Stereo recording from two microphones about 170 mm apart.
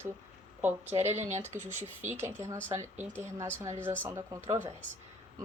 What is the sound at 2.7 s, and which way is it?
Speech, 15° right (ahead or behind).